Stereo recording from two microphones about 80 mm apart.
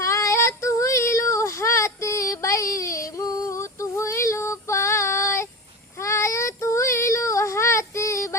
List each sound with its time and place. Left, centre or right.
0.0 s female singing: left
6.0 s child singing: left